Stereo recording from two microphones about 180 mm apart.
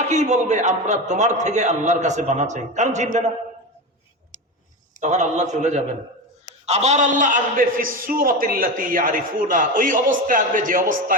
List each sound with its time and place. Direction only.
0.0 s a man's voice: 40° right (ahead or behind)
4.9 s a man's voice: 40° right (ahead or behind)